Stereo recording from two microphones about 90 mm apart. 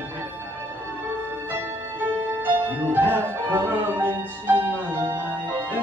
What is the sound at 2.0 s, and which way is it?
Music, 20° right (ahead or behind).